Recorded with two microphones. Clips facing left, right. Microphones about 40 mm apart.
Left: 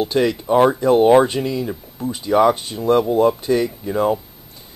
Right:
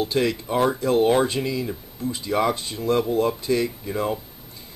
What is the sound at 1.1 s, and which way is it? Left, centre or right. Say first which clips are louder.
Speech: left 7 dB; left.